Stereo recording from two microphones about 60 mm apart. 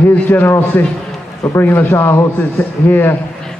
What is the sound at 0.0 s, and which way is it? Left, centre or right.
A man's voice, left.